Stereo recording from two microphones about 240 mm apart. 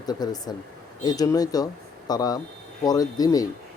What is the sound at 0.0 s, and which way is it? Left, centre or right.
Speech, centre.